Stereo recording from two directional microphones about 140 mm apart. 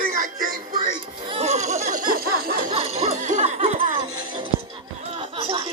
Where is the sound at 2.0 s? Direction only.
90° right.